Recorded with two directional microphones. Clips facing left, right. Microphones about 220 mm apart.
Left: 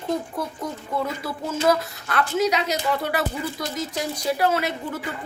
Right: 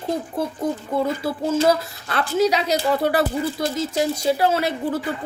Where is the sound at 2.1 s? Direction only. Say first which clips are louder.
Right 3 dB; 30° right (ahead or behind).